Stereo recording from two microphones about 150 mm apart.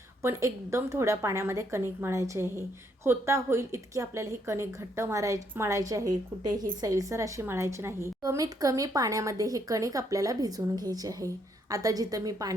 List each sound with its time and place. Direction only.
0.2 s a woman's voice: 20° right (ahead or behind)